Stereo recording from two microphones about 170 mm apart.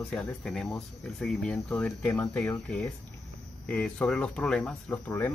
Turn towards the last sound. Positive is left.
turn(degrees=10)  # may be behind; listen again after turning